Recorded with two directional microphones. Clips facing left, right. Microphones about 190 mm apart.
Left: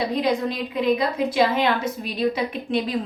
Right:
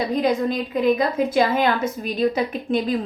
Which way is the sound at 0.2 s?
45° right (ahead or behind).